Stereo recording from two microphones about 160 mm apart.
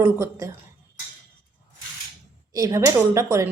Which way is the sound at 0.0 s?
15° right (ahead or behind).